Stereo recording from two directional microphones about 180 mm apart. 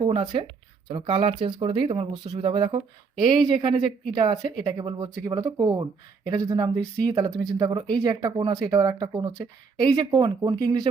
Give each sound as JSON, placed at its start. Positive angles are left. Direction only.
{"t": 0.0, "sound": "speech", "side_deg": -25}